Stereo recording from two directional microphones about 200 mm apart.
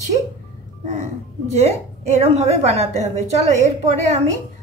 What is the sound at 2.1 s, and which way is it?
A woman's voice, 30° right (ahead or behind).